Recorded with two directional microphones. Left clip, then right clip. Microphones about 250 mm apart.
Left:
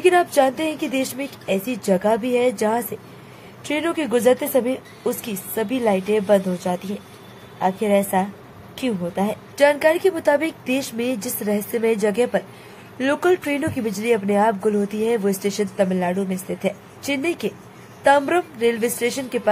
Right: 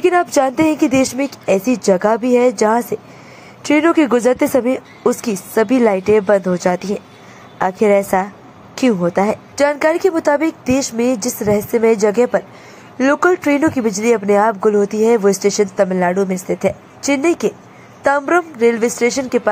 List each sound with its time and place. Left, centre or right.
0.0 s a woman's voice: centre
13.7 s a woman's voice: centre